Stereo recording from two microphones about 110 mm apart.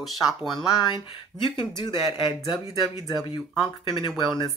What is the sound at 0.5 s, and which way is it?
Speech, 45° left (ahead or behind).